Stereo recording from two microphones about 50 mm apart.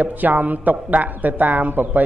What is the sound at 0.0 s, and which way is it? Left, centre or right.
A woman's voice, right.